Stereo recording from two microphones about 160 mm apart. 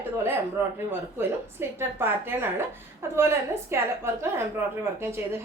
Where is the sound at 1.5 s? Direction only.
15° right (ahead or behind).